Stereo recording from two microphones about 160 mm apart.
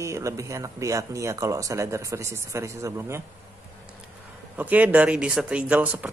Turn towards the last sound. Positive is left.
turn(degrees=-10)  # may be behind; listen again after turning